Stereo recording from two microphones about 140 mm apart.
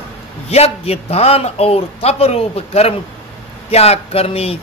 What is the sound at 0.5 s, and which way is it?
A man's voice, 45° left (ahead or behind).